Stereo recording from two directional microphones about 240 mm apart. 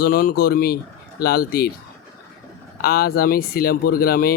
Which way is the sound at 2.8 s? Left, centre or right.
Left.